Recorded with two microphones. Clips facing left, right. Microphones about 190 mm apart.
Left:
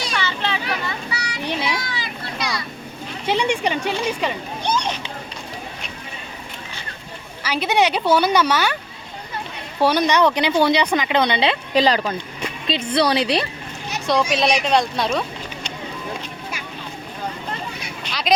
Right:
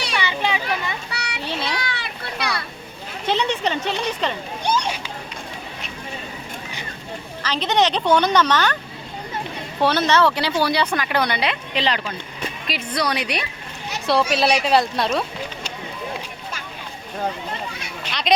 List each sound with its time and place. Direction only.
0.2 s a sound: 15° right (ahead or behind)
1.1 s children playing: 65° right (ahead or behind)
3.2 s a woman's voice: 10° left (ahead or behind)
7.4 s a woman's voice: 10° left (ahead or behind)
9.8 s speech: 15° left (ahead or behind)
11.7 s speech: 40° left (ahead or behind)
12.6 s speech: 25° left (ahead or behind)
14.1 s a woman's voice: 5° right (ahead or behind)
18.1 s speech: centre (ahead or behind)